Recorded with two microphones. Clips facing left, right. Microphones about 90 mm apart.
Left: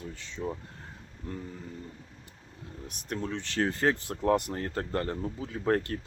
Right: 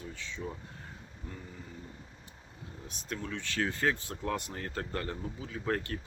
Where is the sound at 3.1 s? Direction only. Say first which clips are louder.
Left 4 dB; 30° left (ahead or behind).